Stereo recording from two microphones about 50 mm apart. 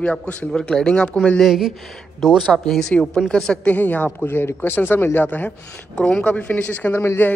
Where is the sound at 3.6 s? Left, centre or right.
Left.